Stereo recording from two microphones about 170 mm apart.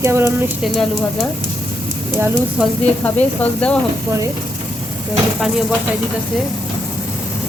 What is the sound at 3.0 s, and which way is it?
Speech, 10° left (ahead or behind).